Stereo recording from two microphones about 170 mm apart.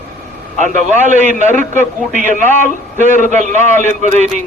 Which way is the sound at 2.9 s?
45° right (ahead or behind).